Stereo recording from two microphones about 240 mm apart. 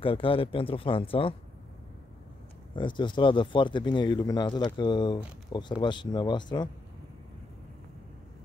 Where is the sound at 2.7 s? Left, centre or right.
Centre.